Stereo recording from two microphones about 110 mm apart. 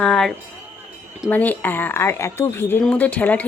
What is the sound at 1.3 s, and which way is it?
A woman's voice, 15° left (ahead or behind).